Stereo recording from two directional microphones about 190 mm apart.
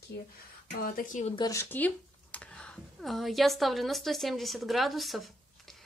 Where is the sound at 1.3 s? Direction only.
20° left (ahead or behind).